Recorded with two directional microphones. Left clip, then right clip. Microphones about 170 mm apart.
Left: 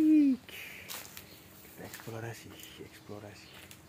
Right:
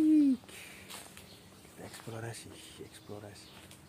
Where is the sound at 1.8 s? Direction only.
5° left (ahead or behind).